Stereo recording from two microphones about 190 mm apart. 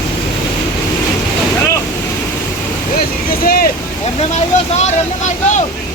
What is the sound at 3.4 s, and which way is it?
Vehicle, 50° left (ahead or behind).